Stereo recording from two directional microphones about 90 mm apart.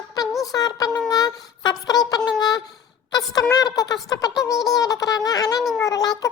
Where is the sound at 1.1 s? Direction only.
45° left (ahead or behind).